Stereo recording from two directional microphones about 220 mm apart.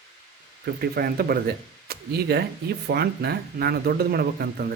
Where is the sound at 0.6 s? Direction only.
45° right (ahead or behind).